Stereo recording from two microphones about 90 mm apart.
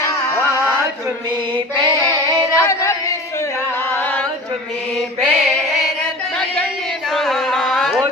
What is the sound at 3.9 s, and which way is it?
Chant, 20° left (ahead or behind).